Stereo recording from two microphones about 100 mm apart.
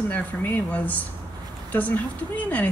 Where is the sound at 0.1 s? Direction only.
15° left (ahead or behind).